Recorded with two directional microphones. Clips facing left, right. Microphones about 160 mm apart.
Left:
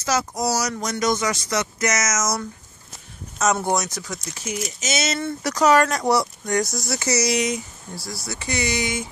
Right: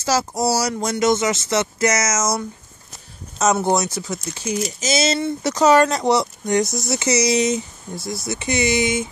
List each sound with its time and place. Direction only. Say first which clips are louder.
0.0 s speech: right 3 dB; 30° right (ahead or behind)
3.6 s speech: right 4 dB; 30° right (ahead or behind)